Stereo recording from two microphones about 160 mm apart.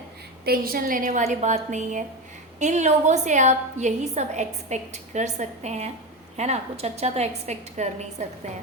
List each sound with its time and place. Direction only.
0.4 s a woman's voice: 70° right (ahead or behind)
1.2 s a woman's voice: 45° right (ahead or behind)